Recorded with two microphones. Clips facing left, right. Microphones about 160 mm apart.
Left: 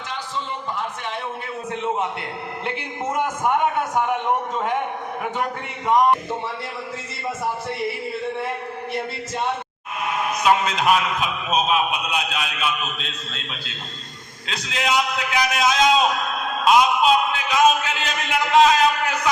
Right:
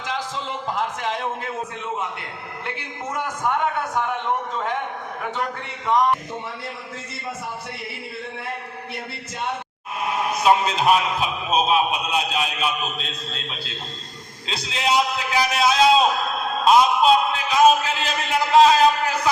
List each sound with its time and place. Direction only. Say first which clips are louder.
0.1 s a sound: right 2 dB; 90° right
2.6 s a man's voice: left 4 dB; 20° left (ahead or behind)
10.0 s a man's voice: right 1 dB; 35° right (ahead or behind)